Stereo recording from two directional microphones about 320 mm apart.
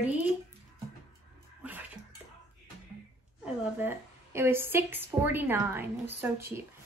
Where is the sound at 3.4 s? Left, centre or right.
Centre.